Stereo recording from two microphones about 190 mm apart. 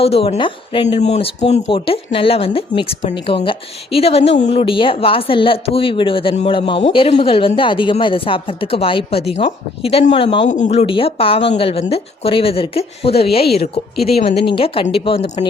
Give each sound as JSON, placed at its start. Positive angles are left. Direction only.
{"t": 0.0, "sound": "a woman's voice", "side_deg": 30}